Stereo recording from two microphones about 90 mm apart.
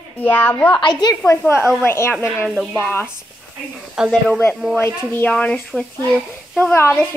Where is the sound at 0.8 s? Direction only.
50° left (ahead or behind).